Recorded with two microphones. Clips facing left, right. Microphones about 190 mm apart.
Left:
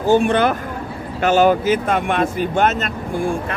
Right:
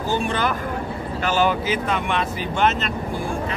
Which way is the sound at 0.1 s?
55° left (ahead or behind).